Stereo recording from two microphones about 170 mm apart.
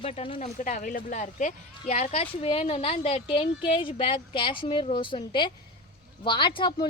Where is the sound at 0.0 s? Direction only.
35° left (ahead or behind).